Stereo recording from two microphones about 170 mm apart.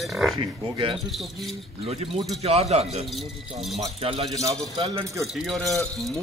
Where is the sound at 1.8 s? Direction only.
35° right (ahead or behind).